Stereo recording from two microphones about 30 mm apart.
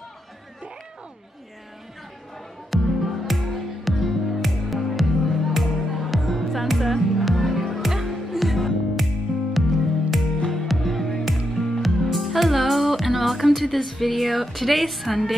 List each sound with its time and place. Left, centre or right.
2.7 s music: centre
14.1 s speech: centre